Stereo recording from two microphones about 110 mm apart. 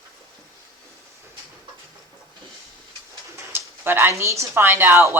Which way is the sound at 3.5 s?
20° right (ahead or behind).